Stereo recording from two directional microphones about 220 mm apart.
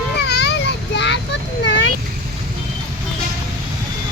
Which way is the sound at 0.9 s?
50° left (ahead or behind).